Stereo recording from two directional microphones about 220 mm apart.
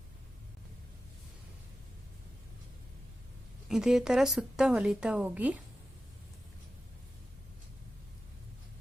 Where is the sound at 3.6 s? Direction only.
Centre (ahead or behind).